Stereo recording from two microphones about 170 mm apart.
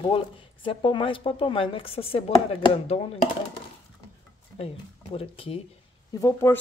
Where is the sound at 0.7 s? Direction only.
30° left (ahead or behind).